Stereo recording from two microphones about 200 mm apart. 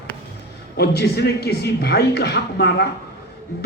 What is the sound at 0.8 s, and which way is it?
A man's voice, 55° left (ahead or behind).